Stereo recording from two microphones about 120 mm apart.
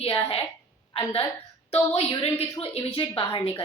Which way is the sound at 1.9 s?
60° left (ahead or behind).